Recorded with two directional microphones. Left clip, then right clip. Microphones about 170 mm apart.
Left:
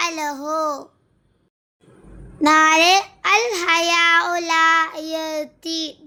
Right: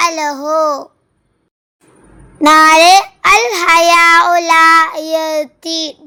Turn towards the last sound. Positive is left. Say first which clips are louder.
# right 7 dB
turn(degrees=-20)  # may be behind; listen again after turning